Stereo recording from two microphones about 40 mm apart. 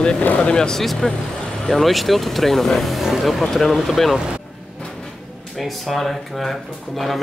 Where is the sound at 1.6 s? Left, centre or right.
Centre.